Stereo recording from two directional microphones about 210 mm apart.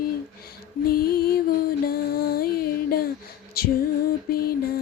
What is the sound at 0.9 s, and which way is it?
Music, 45° left (ahead or behind).